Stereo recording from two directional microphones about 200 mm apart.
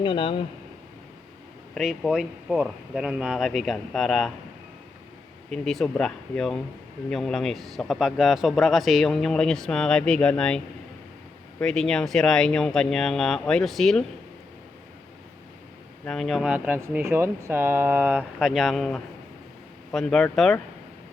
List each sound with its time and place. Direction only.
0.0 s a man's voice: 25° left (ahead or behind)
1.7 s speech: centre (ahead or behind)
5.5 s speech: centre (ahead or behind)
11.6 s speech: 5° left (ahead or behind)
16.0 s speech: centre (ahead or behind)